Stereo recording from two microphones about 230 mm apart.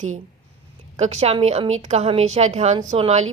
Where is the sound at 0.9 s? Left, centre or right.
Right.